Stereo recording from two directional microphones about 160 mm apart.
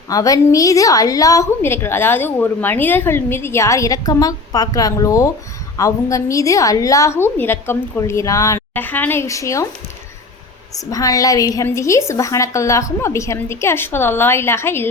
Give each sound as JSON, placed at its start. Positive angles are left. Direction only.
{"t": 0.1, "sound": "a woman's voice", "side_deg": 20}
{"t": 10.9, "sound": "a woman's voice", "side_deg": 20}